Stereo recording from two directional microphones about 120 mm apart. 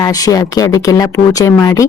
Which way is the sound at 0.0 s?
30° left (ahead or behind).